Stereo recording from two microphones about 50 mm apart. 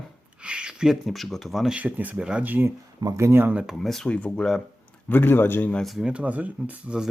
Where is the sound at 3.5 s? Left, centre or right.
Centre.